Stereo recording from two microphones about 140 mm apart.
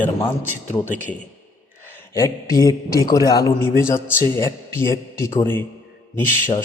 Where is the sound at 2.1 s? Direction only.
20° left (ahead or behind).